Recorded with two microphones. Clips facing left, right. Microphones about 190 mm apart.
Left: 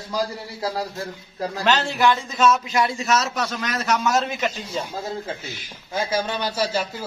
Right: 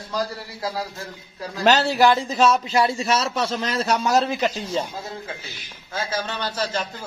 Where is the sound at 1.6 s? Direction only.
40° right (ahead or behind).